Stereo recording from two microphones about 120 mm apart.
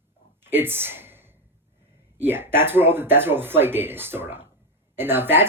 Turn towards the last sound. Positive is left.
turn(degrees=-15)  # may be behind; listen again after turning